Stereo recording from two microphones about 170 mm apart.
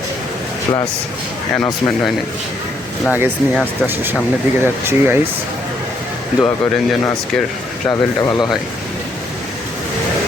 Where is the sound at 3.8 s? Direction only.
10° right (ahead or behind).